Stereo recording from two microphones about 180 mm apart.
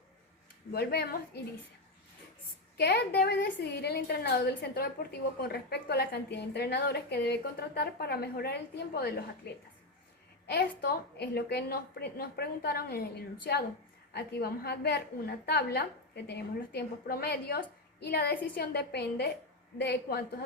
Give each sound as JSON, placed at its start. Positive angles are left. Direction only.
{"t": 0.7, "sound": "a woman's voice", "side_deg": 60}
{"t": 2.7, "sound": "a woman's voice", "side_deg": 65}